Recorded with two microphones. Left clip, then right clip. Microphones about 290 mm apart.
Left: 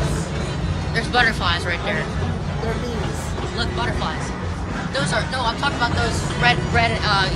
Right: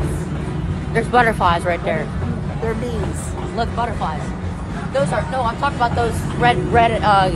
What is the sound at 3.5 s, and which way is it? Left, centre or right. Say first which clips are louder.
Speech: right 4 dB; centre.